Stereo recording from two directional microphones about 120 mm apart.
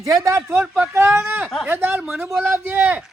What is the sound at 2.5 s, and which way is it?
Speech, 20° right (ahead or behind).